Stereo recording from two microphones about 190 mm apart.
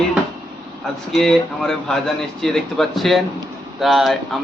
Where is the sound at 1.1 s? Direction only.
Centre (ahead or behind).